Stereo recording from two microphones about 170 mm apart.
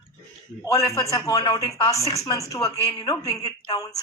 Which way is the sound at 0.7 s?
20° left (ahead or behind).